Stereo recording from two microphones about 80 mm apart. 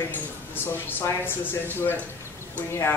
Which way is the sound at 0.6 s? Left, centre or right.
Left.